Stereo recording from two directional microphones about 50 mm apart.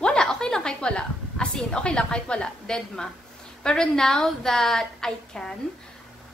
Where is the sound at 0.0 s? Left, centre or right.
Centre.